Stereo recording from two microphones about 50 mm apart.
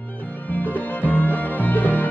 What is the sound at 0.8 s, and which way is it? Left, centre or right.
Music, left.